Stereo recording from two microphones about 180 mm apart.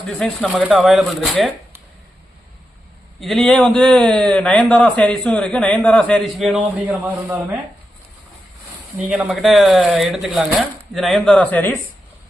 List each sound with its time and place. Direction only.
0.1 s a man's voice: 5° left (ahead or behind)
3.2 s a man's voice: centre (ahead or behind)
9.0 s a man's voice: 5° right (ahead or behind)